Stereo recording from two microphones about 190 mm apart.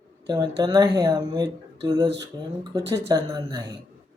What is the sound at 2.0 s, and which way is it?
Speech, 65° right (ahead or behind).